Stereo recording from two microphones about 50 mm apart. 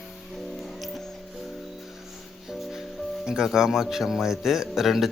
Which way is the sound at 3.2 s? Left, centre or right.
Centre.